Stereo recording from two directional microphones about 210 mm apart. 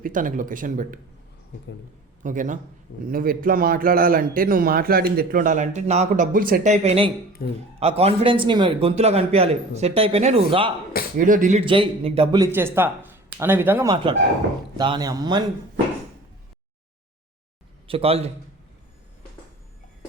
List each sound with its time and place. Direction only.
0.0 s speech: 40° right (ahead or behind)
2.2 s a man's voice: 35° right (ahead or behind)
7.4 s a man's voice: 45° left (ahead or behind)
7.8 s a man's voice: 30° right (ahead or behind)
11.2 s speech: 40° right (ahead or behind)
11.6 s a man's voice: 25° right (ahead or behind)
12.5 s speech: 10° right (ahead or behind)
13.9 s a man's voice: 25° right (ahead or behind)
17.8 s a man's voice: 25° right (ahead or behind)